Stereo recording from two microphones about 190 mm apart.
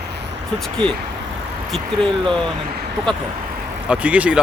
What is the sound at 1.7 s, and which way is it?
Speech, centre (ahead or behind).